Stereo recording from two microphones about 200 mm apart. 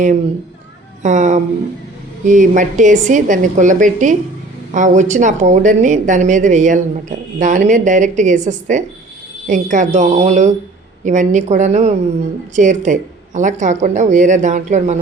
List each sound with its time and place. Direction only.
1.0 s speech: 35° right (ahead or behind)